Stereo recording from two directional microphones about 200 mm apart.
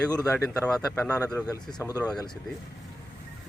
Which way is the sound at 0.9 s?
10° left (ahead or behind).